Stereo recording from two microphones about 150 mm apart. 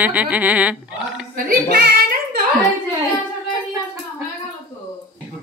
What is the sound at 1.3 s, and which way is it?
Speech, 85° right.